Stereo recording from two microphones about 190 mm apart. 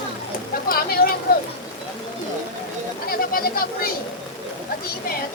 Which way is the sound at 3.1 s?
50° left (ahead or behind).